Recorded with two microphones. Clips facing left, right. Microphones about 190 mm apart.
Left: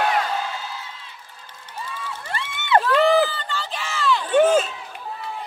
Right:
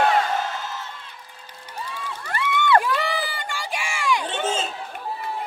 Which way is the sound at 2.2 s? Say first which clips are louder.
Right 7 dB; 25° left (ahead or behind).